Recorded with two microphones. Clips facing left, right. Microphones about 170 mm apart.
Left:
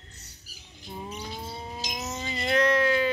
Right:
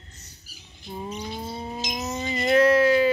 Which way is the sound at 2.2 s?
5° right (ahead or behind).